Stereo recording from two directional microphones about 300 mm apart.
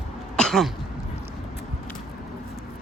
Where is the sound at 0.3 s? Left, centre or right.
Centre.